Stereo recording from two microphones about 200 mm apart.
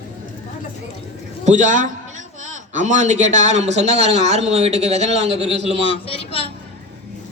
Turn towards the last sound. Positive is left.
turn(degrees=30)  # may be behind; listen again after turning